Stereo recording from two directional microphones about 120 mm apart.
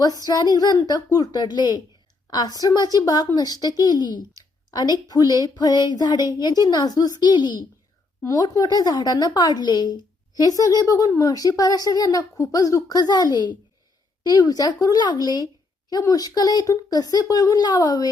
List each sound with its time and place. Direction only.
0.0 s a woman's voice: 35° left (ahead or behind)